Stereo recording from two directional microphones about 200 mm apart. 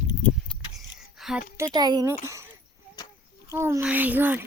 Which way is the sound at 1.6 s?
20° right (ahead or behind).